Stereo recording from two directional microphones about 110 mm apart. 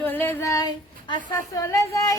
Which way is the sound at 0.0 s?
15° left (ahead or behind).